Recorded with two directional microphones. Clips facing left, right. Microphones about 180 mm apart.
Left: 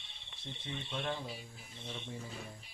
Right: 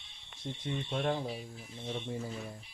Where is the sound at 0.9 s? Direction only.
40° right (ahead or behind).